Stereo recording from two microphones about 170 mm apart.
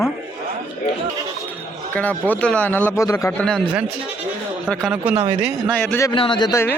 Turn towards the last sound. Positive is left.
turn(degrees=15)  # may be behind; listen again after turning